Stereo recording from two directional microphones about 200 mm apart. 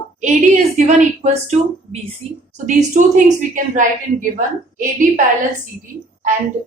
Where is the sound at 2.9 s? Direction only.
40° right (ahead or behind).